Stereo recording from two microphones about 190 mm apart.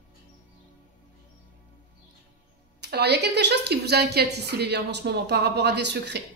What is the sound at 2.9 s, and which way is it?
A man's voice, 60° right (ahead or behind).